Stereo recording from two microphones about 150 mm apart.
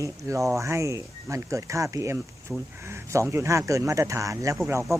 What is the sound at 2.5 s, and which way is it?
Speech, 5° right (ahead or behind).